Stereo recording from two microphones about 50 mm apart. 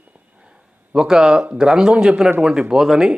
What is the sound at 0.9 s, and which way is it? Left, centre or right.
Speech, centre.